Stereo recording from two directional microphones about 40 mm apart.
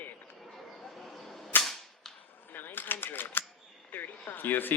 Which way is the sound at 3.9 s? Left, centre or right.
Left.